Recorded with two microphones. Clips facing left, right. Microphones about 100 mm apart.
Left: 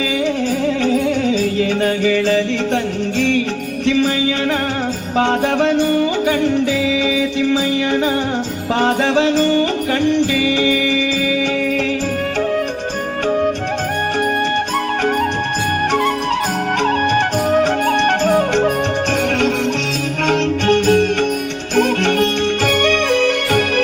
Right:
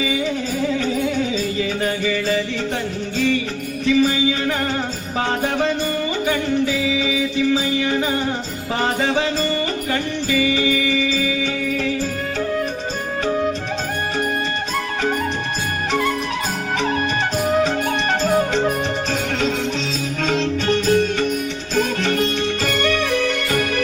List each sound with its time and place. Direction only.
0.6 s music: 65° left (ahead or behind)
17.5 s music: 55° left (ahead or behind)
20.2 s music: 60° left (ahead or behind)